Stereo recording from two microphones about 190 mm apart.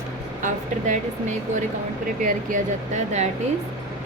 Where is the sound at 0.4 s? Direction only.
40° right (ahead or behind).